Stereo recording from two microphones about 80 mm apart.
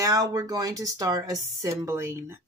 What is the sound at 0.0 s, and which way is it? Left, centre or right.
A woman's voice, right.